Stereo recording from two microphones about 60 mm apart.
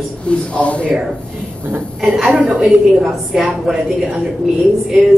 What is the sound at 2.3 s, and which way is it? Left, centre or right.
Speech, centre.